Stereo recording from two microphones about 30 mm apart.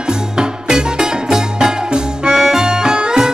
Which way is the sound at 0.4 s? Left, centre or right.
Right.